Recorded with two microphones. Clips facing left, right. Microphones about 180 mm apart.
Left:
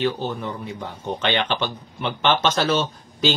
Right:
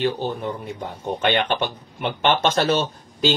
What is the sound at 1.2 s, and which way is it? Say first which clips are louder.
Speech: right 2 dB; 50° right (ahead or behind).